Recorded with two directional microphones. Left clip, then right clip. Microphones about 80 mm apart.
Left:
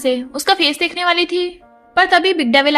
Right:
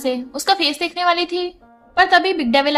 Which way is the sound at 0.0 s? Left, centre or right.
Left.